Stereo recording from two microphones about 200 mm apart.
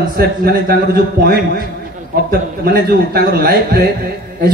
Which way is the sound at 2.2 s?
50° right (ahead or behind).